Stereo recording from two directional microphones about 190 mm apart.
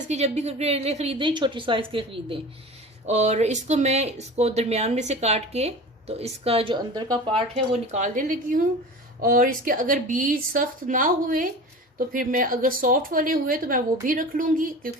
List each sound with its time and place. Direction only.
0.1 s a woman's voice: 35° right (ahead or behind)